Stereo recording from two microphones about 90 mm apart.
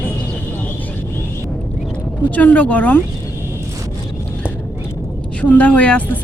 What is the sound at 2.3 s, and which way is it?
Speech, 20° left (ahead or behind).